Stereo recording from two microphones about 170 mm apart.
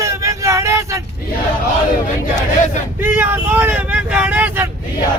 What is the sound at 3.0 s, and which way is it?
Vehicle, 15° right (ahead or behind).